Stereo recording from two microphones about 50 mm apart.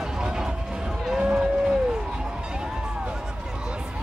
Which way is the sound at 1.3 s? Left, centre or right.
Centre.